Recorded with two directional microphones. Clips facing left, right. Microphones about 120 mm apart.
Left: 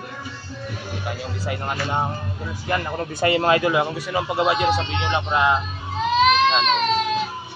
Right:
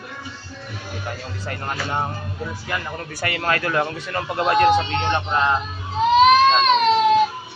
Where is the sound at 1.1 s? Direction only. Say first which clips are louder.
Left 3 dB; 10° left (ahead or behind).